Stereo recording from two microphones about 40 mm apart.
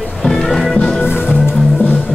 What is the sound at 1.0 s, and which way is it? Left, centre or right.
Music, left.